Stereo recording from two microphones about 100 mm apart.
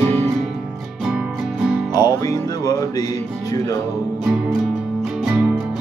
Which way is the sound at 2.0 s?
40° left (ahead or behind).